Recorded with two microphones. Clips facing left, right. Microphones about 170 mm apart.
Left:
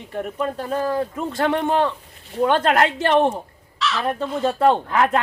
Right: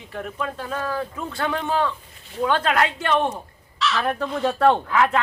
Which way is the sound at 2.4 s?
35° left (ahead or behind).